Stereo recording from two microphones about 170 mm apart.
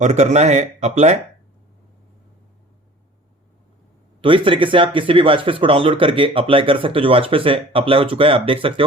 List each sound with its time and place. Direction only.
0.0 s speech: 45° right (ahead or behind)
4.2 s speech: 30° right (ahead or behind)